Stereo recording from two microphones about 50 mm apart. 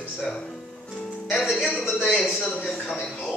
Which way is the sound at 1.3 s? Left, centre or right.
Centre.